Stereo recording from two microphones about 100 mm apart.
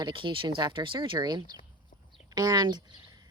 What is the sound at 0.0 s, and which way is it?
Speech, 55° right (ahead or behind).